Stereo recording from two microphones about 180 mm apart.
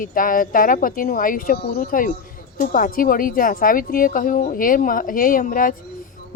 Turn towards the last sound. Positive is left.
turn(degrees=50)  # may be behind; listen again after turning